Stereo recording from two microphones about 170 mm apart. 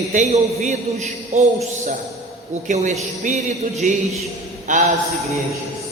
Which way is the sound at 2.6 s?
45° right (ahead or behind).